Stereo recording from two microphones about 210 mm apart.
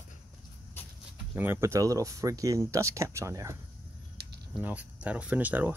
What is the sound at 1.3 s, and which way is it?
Speech, 10° right (ahead or behind).